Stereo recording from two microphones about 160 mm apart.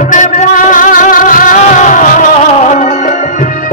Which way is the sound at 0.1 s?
50° left (ahead or behind).